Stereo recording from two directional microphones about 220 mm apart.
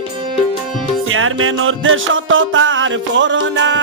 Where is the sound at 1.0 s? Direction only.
65° right (ahead or behind).